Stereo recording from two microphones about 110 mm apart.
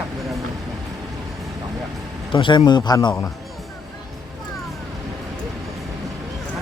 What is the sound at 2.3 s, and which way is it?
Speech, 45° left (ahead or behind).